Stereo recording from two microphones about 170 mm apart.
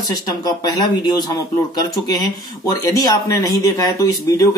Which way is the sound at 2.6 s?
20° left (ahead or behind).